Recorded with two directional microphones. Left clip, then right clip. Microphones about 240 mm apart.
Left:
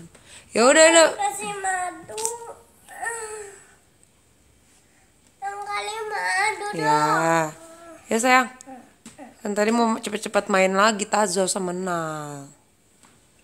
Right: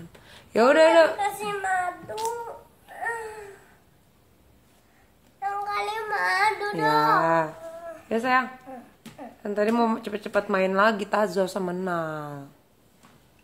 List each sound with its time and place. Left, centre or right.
0.3 s a man's voice: centre
1.2 s a sound: centre
5.4 s child singing: centre
6.7 s child singing: centre
8.1 s speech: left
8.7 s a sound: centre
9.4 s speech: left